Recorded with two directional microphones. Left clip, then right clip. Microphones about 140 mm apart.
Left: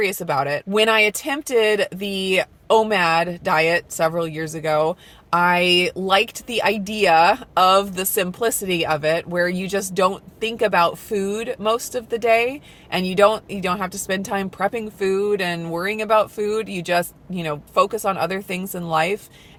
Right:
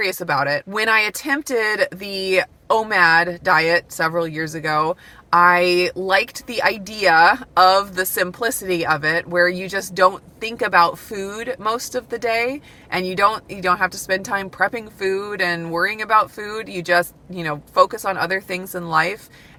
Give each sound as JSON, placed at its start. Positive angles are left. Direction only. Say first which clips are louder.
{"t": 0.0, "sound": "speech", "louder": "right 1 dB", "side_deg": 20}